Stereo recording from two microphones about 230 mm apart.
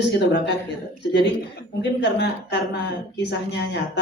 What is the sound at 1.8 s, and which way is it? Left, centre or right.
Music, left.